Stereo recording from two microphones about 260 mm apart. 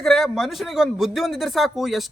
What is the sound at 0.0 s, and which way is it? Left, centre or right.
A man's voice, centre.